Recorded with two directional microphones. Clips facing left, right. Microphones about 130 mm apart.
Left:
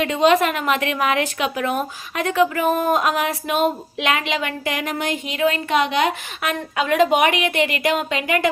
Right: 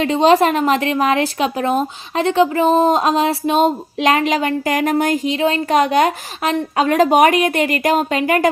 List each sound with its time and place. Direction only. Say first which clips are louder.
0.0 s a woman's voice: right 4 dB; 35° right (ahead or behind)